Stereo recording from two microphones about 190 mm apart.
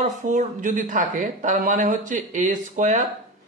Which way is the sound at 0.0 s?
40° right (ahead or behind).